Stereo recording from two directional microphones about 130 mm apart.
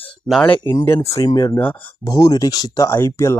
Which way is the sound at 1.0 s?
25° left (ahead or behind).